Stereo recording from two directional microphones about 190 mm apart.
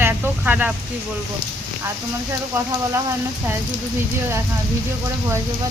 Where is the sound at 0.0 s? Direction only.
10° right (ahead or behind).